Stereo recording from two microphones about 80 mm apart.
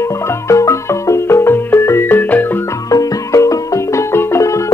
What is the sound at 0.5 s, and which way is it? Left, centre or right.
Music, left.